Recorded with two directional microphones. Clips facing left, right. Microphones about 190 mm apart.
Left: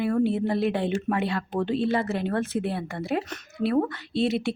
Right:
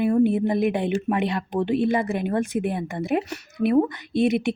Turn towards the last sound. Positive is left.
turn(degrees=-15)  # may be behind; listen again after turning